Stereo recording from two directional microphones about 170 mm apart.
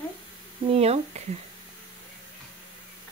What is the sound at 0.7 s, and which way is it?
Speech, 40° right (ahead or behind).